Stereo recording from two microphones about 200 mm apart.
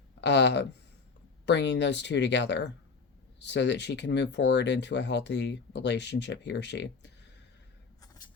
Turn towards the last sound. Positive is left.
turn(degrees=60)  # may be behind; listen again after turning